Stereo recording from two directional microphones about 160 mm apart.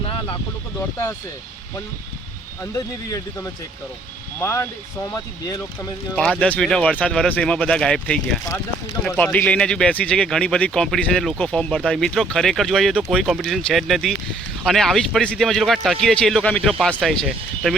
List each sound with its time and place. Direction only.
2.7 s speech: 20° left (ahead or behind)
6.4 s speech: 5° left (ahead or behind)